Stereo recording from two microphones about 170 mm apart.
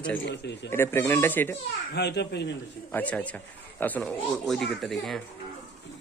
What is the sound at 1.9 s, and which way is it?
Speech, 80° left.